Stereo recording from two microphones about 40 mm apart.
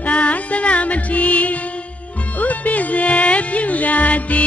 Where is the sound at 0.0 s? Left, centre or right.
Left.